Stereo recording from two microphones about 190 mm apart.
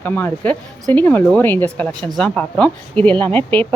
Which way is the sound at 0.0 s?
10° left (ahead or behind).